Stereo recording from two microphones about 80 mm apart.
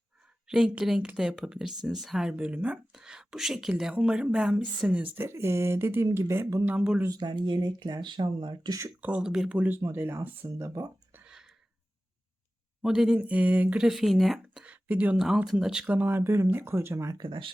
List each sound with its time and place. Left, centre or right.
0.4 s speech: centre
2.3 s speech: centre; by 6.7 s right
6.7 s speech: centre
7.1 s speech: right
9.0 s speech: centre
9.6 s speech: right
11.3 s a sound: centre
12.8 s speech: centre
13.1 s speech: centre
13.7 s speech: centre
14.6 s a sound: centre
15.1 s speech: centre; by 17.2 s right
17.2 s speech: right